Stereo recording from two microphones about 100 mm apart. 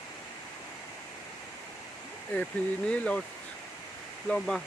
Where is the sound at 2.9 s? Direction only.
10° left (ahead or behind).